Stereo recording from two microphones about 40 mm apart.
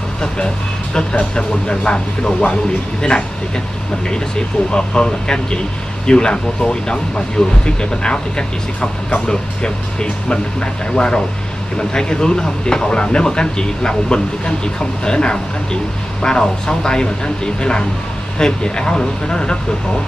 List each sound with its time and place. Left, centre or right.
1.3 s speech: left
4.6 s speech: left